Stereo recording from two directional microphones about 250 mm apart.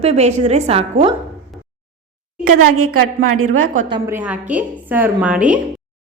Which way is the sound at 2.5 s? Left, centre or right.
Right.